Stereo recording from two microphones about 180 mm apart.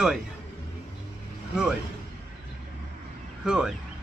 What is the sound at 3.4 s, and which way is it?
Speech, 5° right (ahead or behind).